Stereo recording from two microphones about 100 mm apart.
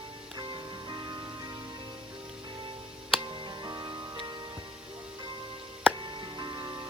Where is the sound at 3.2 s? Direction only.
45° right (ahead or behind).